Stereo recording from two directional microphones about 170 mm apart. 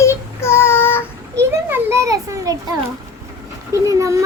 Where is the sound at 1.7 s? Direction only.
15° right (ahead or behind).